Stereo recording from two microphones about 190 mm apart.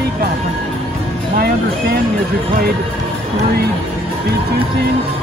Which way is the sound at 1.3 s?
55° right (ahead or behind).